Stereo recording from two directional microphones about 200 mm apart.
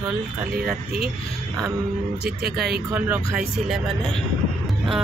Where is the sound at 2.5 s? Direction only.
50° right (ahead or behind).